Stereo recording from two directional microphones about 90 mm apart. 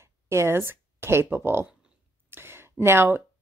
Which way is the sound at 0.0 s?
30° right (ahead or behind).